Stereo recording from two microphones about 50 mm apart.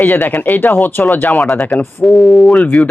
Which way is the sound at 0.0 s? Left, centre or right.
Left.